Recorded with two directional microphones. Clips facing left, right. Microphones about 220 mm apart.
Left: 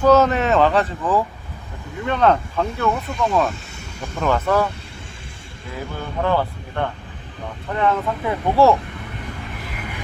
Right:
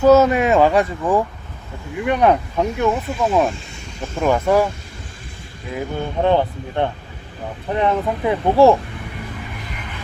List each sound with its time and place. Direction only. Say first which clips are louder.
0.0 s speech: right 3 dB; 10° right (ahead or behind)
2.9 s speech: right 2 dB; 5° right (ahead or behind)
5.7 s speech: right 4 dB; 20° right (ahead or behind)